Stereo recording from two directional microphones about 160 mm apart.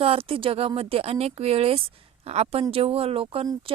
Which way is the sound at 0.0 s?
35° right (ahead or behind).